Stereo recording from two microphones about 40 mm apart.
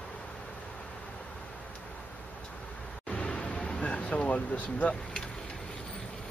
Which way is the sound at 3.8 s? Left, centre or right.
Left.